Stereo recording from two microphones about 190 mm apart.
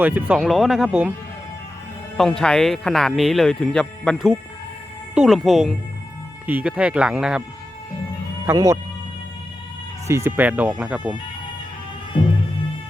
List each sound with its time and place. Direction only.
0.0 s speech: 5° right (ahead or behind)
2.1 s speech: centre (ahead or behind)
8.4 s speech: 15° right (ahead or behind)
10.1 s speech: 15° right (ahead or behind)
12.1 s music: 25° left (ahead or behind)